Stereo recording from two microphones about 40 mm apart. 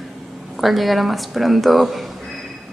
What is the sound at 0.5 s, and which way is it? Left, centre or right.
A woman's voice, centre.